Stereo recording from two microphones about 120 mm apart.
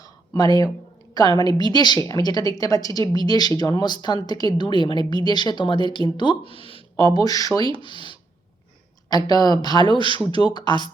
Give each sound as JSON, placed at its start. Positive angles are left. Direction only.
{"t": 0.3, "sound": "a woman's voice", "side_deg": 35}
{"t": 6.9, "sound": "a woman's voice", "side_deg": 30}
{"t": 7.8, "sound": "a woman's voice", "side_deg": 45}